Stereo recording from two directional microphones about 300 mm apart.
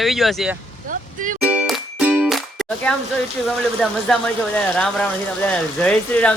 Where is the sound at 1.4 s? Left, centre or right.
Centre.